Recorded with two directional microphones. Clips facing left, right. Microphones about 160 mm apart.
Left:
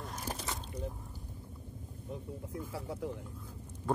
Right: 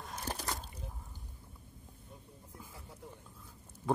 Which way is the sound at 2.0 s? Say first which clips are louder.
Left 15 dB; 90° left.